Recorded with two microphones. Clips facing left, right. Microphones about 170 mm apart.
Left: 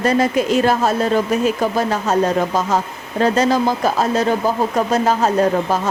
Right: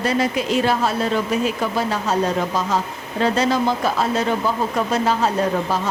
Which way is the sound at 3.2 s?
45° left (ahead or behind).